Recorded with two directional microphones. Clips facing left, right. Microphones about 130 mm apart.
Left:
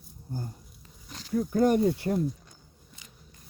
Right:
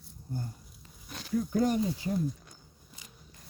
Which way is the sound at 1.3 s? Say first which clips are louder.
Left 4 dB; 50° left (ahead or behind).